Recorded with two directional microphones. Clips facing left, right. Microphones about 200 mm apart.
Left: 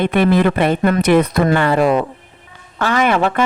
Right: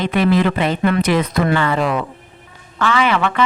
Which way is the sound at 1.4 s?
45° left (ahead or behind).